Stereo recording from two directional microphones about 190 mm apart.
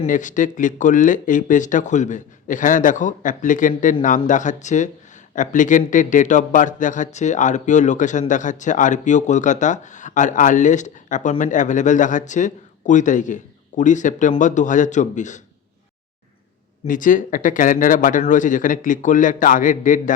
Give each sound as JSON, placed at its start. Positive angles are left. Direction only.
{"t": 0.0, "sound": "speech", "side_deg": 40}
{"t": 16.8, "sound": "speech", "side_deg": 45}